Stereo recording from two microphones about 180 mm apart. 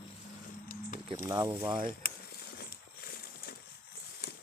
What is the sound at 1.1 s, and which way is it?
Speech, 15° right (ahead or behind).